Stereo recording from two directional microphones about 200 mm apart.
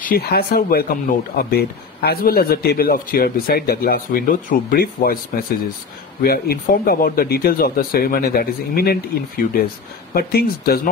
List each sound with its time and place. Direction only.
0.0 s speech: 50° left (ahead or behind)
6.2 s speech: 50° left (ahead or behind)